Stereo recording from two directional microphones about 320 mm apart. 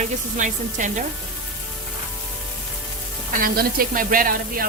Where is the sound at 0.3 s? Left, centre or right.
Right.